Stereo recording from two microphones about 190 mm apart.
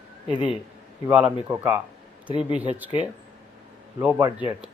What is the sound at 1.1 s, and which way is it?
Speech, 5° right (ahead or behind).